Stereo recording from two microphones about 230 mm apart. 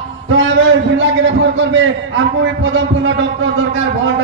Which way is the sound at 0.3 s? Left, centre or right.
Right.